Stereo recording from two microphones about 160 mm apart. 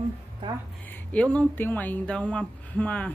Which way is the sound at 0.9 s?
10° left (ahead or behind).